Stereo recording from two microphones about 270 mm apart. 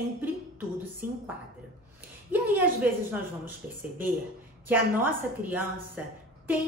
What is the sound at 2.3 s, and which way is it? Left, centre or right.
A woman's voice, centre.